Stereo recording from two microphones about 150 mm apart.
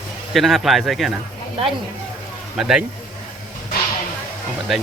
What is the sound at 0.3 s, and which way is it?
Speech, centre (ahead or behind).